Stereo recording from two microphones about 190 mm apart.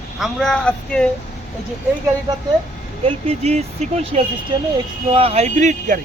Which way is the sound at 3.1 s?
35° right (ahead or behind).